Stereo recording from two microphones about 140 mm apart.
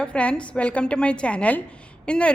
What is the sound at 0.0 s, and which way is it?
A woman's voice, 5° left (ahead or behind).